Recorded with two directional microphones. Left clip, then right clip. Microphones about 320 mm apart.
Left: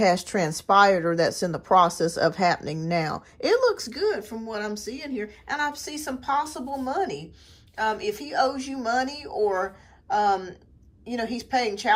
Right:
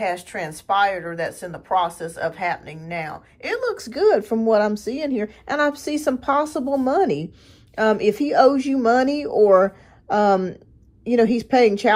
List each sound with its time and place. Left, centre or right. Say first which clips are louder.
0.0 s a woman's voice: left 3 dB; centre